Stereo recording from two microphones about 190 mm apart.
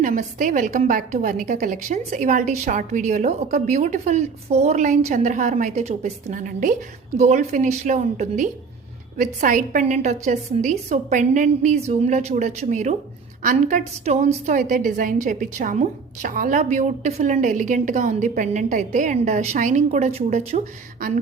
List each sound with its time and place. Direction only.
0.0 s a woman's voice: 45° right (ahead or behind)